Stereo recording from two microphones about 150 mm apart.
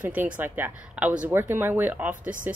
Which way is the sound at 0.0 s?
10° right (ahead or behind).